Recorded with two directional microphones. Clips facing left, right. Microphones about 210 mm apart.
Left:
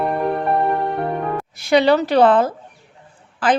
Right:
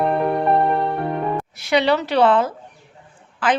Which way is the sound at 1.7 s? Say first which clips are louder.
Left 4 dB; 45° left (ahead or behind).